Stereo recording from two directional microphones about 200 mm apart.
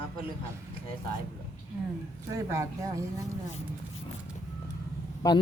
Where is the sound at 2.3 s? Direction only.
15° right (ahead or behind).